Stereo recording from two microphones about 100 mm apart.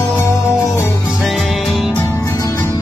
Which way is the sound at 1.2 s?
Centre (ahead or behind).